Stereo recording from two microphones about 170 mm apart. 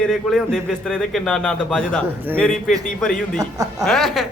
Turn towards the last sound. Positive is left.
turn(degrees=0)  # may be behind; listen again after turning